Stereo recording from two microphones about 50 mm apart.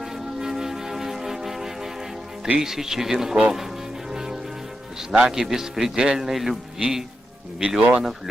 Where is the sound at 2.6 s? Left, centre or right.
Centre.